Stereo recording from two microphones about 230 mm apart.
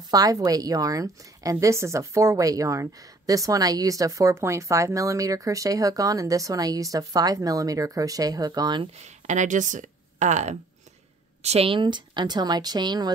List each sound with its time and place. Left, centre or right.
0.1 s a woman's voice: centre
9.0 s speech: right